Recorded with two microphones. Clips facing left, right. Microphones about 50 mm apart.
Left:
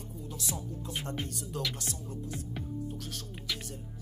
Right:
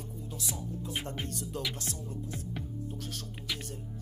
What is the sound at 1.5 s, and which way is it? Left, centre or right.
Speech, centre.